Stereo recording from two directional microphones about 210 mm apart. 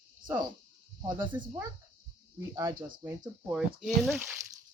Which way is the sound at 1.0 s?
10° right (ahead or behind).